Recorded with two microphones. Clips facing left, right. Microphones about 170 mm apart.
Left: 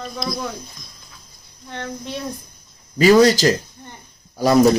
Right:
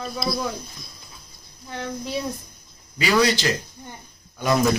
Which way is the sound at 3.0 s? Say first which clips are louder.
Left 8 dB; 40° left (ahead or behind).